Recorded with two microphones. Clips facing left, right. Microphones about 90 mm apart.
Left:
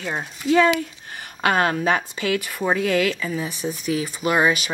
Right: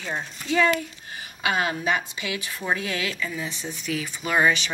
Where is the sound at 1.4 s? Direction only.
50° left (ahead or behind).